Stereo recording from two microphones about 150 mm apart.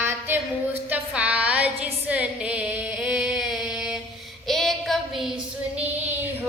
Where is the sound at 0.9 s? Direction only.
10° right (ahead or behind).